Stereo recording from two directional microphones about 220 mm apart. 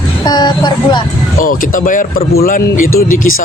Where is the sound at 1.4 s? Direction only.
40° left (ahead or behind).